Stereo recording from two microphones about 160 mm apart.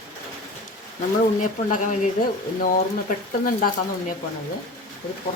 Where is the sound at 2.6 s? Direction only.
60° left (ahead or behind).